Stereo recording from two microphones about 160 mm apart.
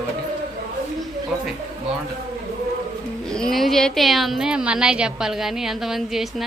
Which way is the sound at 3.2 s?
5° left (ahead or behind).